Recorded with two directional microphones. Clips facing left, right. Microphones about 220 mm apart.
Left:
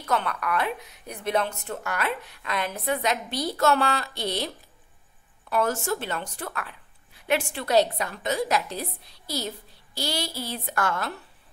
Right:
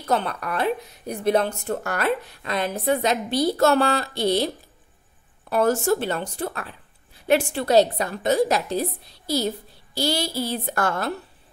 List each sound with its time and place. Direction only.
0.0 s a woman's voice: 30° right (ahead or behind)
5.5 s a woman's voice: 35° right (ahead or behind)
9.9 s a woman's voice: 30° right (ahead or behind)